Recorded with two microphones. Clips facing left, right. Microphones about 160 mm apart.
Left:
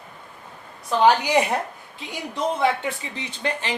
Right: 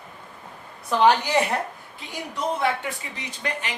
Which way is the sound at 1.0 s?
15° left (ahead or behind).